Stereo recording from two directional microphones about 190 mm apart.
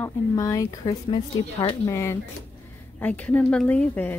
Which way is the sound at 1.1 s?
30° left (ahead or behind).